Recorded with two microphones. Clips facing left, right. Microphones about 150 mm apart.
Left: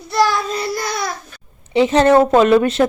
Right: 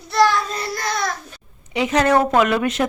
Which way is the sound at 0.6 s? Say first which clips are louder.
Left 2 dB; 10° left (ahead or behind).